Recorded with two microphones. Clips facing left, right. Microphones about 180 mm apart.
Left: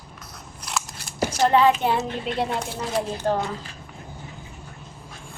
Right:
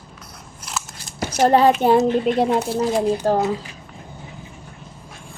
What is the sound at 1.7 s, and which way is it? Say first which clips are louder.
Speech: right 7 dB; 45° right (ahead or behind).